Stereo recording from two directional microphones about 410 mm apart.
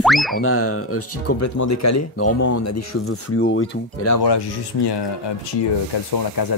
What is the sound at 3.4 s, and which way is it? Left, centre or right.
Speech, left.